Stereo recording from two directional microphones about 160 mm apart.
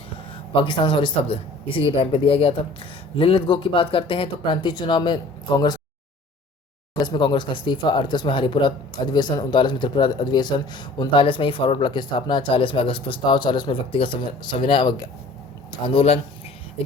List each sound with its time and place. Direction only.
0.5 s speech: 30° left (ahead or behind)
6.9 s speech: 30° left (ahead or behind)